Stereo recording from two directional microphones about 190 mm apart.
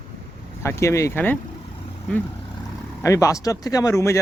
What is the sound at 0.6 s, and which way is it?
Speech, 15° left (ahead or behind).